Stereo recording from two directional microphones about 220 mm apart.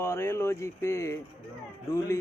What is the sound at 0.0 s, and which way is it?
Speech, 10° left (ahead or behind).